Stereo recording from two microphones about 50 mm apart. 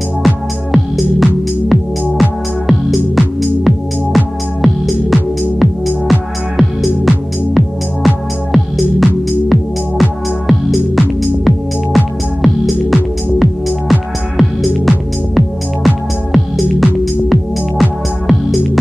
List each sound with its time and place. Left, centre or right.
0.2 s music: centre